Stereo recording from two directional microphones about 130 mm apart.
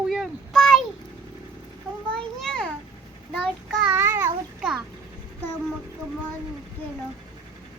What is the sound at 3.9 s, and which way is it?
Babbling, 20° right (ahead or behind).